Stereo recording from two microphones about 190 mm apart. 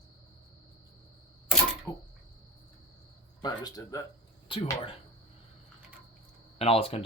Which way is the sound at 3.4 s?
20° left (ahead or behind).